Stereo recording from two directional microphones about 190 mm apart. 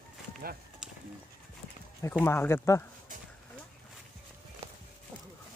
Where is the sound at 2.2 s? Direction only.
10° left (ahead or behind).